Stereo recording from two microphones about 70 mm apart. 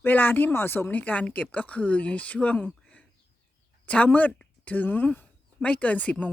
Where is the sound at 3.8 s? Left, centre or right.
Centre.